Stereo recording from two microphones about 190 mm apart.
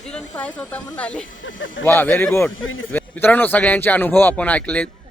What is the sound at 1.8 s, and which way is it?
A man's voice, 10° left (ahead or behind).